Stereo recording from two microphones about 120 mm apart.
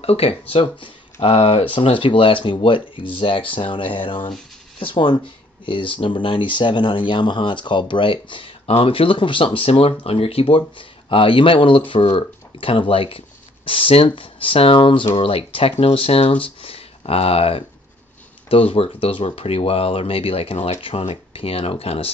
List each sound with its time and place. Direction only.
0.0 s speech: 55° left (ahead or behind)